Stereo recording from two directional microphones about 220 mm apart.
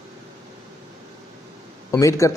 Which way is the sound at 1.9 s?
15° left (ahead or behind).